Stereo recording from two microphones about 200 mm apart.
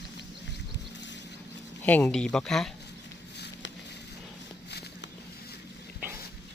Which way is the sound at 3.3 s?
60° left (ahead or behind).